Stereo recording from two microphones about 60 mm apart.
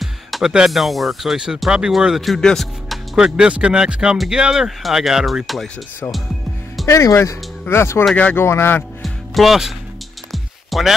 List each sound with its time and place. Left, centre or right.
0.0 s music: centre
0.7 s speech: centre
3.2 s speech: centre
6.9 s speech: left
7.6 s a man's voice: left
9.0 s music: centre